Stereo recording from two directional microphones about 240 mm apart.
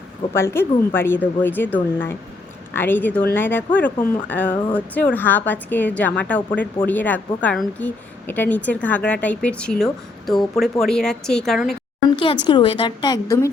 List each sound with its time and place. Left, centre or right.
0.3 s a woman's voice: centre
12.1 s a woman's voice: left